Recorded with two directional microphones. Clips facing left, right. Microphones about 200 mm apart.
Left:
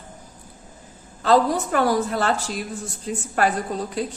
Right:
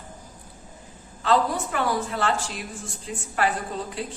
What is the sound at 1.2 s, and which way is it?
A woman's voice, 40° left (ahead or behind).